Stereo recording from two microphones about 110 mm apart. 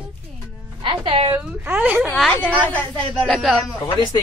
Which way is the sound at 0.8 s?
55° right (ahead or behind).